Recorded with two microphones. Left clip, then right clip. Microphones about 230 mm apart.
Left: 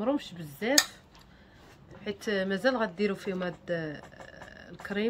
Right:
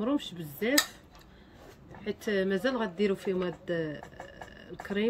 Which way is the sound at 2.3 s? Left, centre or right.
Centre.